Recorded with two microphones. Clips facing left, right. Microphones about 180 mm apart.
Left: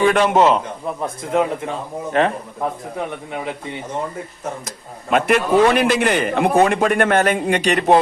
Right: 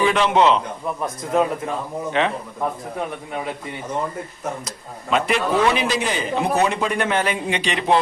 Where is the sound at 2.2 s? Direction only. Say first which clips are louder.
Left 4 dB; 45° left (ahead or behind).